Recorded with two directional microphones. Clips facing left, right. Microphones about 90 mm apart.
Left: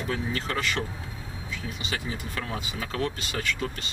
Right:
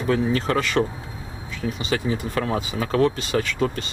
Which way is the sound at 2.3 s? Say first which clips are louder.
Right 9 dB; 40° right (ahead or behind).